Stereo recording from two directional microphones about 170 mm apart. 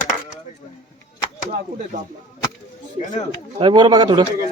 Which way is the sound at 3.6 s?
30° right (ahead or behind).